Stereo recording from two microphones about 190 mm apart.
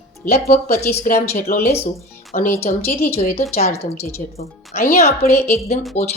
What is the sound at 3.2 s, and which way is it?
Speech, 35° left (ahead or behind).